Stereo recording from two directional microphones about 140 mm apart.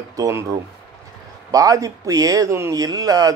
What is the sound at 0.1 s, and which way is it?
Speech, 20° right (ahead or behind).